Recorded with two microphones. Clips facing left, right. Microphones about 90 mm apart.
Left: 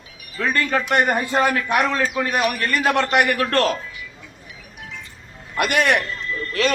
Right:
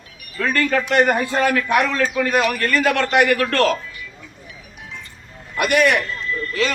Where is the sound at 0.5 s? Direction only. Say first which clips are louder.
Right 2 dB; 20° left (ahead or behind).